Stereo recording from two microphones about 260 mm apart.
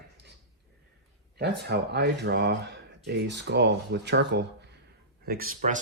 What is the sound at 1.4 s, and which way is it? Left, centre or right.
Speech, right.